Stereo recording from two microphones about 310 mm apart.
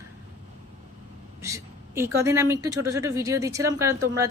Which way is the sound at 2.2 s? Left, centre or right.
Centre.